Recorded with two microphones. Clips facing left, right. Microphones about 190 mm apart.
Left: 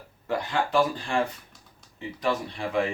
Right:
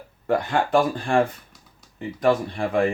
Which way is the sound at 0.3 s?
55° right (ahead or behind).